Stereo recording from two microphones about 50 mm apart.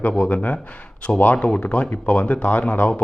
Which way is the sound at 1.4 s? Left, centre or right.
Left.